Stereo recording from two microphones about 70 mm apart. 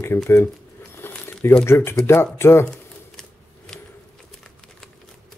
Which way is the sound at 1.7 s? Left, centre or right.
Left.